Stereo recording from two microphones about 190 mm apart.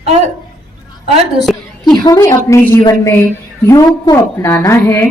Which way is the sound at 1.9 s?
20° left (ahead or behind).